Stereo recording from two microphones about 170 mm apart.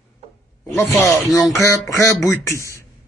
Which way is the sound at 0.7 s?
15° left (ahead or behind).